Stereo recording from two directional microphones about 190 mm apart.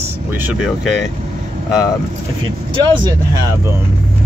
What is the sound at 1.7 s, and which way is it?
Speech, 20° left (ahead or behind).